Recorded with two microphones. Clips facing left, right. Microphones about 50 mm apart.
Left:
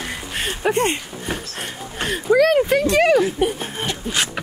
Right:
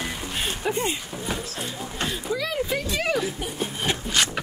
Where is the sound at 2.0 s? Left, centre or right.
Left.